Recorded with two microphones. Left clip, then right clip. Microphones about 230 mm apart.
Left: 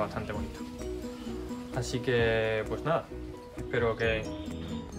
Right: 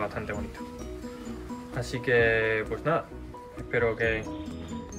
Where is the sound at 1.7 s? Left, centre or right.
Centre.